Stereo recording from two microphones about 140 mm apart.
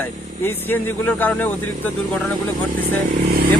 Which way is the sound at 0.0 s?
15° left (ahead or behind).